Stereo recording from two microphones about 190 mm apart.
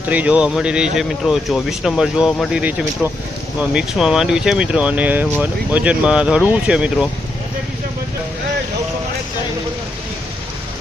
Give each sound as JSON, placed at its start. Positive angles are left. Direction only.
{"t": 0.1, "sound": "speech", "side_deg": -5}